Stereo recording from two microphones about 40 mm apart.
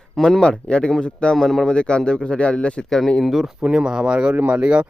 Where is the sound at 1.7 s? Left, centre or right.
Left.